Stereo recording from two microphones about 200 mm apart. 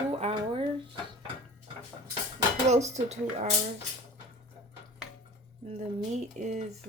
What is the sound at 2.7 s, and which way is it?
Speech, 35° right (ahead or behind).